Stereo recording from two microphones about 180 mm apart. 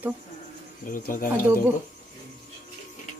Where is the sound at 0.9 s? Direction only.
50° left (ahead or behind).